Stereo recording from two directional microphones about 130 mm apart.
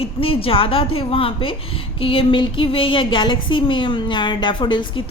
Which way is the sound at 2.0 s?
45° left (ahead or behind).